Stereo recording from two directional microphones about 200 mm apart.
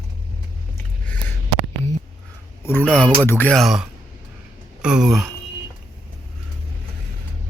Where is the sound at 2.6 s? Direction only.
10° left (ahead or behind).